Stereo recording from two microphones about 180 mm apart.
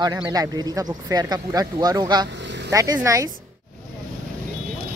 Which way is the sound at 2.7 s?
20° right (ahead or behind).